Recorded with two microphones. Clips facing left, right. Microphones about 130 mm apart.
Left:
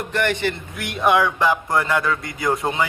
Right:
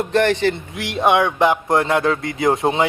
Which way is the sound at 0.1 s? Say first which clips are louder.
Right 5 dB; 25° right (ahead or behind).